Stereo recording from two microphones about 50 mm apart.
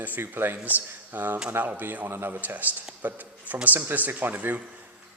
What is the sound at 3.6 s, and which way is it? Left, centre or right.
Speech, right.